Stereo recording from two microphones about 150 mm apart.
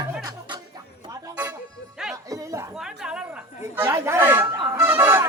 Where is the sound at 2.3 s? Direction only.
20° right (ahead or behind).